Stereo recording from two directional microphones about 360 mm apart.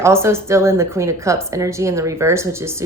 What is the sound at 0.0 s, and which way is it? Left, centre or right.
Speech, centre.